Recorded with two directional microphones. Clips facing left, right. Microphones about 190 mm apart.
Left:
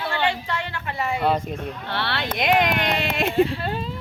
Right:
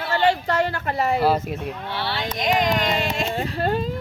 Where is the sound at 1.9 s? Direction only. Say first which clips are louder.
Left 2 dB; 65° left (ahead or behind).